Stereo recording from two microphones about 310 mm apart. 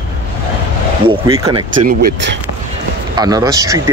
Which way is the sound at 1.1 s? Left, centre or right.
Centre.